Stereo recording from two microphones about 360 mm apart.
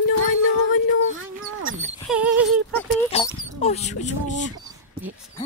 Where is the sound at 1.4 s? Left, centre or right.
Right.